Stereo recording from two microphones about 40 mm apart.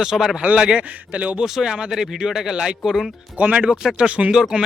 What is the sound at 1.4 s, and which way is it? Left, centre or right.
A man's voice, centre.